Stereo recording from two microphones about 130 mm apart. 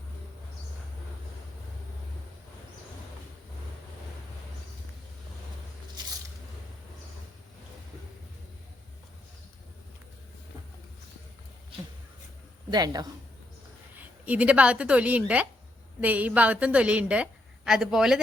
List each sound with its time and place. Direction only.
6.0 s biting: 35° right (ahead or behind)
12.7 s speech: 30° right (ahead or behind)
13.9 s a woman's voice: 15° right (ahead or behind)